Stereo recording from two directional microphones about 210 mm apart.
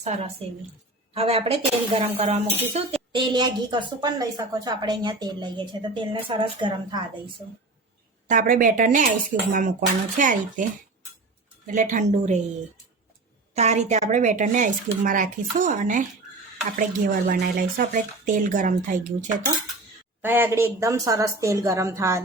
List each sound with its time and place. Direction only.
0.0 s a woman's voice: 30° right (ahead or behind)
2.5 s a woman's voice: 10° right (ahead or behind)
2.7 s a woman's voice: 20° right (ahead or behind)
8.3 s speech: 40° right (ahead or behind)
13.5 s speech: 30° right (ahead or behind)
20.2 s a woman's voice: 10° right (ahead or behind)